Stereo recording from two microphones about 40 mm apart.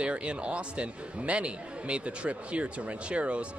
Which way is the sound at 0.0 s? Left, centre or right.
Right.